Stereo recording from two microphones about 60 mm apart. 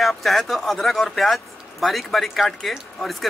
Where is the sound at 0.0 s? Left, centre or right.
Centre.